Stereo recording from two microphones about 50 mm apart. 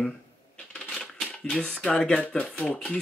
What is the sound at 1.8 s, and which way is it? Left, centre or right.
Speech, centre.